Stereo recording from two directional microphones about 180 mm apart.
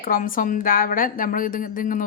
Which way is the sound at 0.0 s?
50° left (ahead or behind).